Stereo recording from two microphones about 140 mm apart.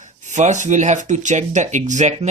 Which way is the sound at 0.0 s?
60° right (ahead or behind).